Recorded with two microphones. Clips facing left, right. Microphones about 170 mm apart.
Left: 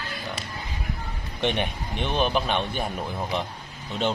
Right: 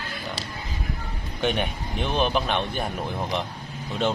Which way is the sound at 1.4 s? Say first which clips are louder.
Right 1 dB; 5° right (ahead or behind).